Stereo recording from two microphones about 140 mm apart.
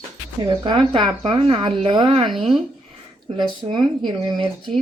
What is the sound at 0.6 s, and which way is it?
Speech, 35° right (ahead or behind).